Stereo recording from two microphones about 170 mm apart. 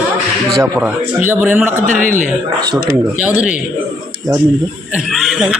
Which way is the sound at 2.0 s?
50° right (ahead or behind).